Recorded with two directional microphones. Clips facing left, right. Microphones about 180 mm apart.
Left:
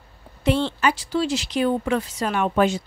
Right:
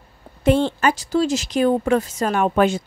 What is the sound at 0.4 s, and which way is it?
A woman's voice, 50° right (ahead or behind).